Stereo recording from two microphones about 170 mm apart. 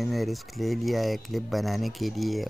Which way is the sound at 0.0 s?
Centre (ahead or behind).